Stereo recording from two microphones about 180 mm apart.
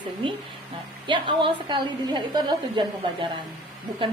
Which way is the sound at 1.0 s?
25° right (ahead or behind).